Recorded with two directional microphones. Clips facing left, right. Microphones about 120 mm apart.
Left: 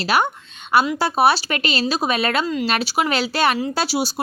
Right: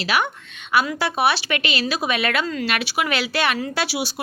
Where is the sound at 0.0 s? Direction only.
40° left (ahead or behind).